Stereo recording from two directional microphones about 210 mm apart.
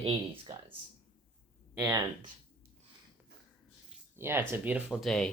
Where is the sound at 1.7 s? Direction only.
10° right (ahead or behind).